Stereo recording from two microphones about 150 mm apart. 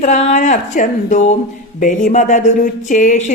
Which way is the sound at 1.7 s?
60° left (ahead or behind).